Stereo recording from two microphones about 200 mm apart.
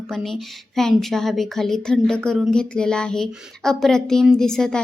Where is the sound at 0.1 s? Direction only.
Centre (ahead or behind).